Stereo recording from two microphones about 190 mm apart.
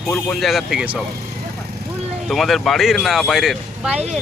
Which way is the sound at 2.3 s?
Centre (ahead or behind).